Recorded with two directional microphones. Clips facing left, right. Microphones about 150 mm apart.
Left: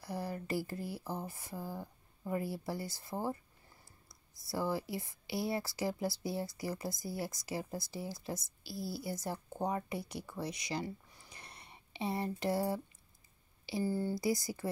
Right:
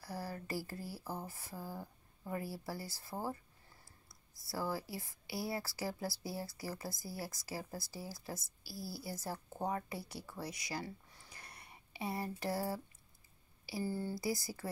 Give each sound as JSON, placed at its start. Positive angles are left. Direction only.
{"t": 0.0, "sound": "speech", "side_deg": 20}
{"t": 13.8, "sound": "speech", "side_deg": 50}
{"t": 14.1, "sound": "speech", "side_deg": 20}